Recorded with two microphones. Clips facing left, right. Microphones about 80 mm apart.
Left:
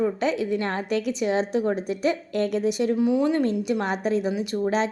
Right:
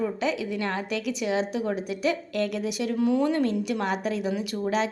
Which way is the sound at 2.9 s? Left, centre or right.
Centre.